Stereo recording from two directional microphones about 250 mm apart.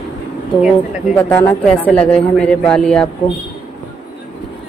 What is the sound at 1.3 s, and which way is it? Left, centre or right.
Speech, centre.